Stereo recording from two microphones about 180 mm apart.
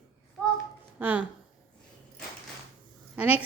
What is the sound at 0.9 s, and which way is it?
Speech, 10° right (ahead or behind).